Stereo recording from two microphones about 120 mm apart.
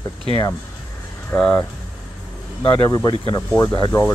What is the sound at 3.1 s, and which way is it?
Speech, 45° left (ahead or behind).